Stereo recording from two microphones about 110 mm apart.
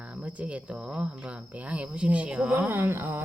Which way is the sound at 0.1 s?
10° right (ahead or behind).